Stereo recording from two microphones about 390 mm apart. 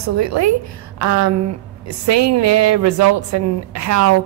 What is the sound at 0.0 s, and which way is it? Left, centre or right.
A woman's voice, right.